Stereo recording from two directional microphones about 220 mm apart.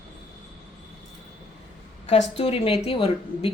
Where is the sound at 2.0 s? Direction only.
30° left (ahead or behind).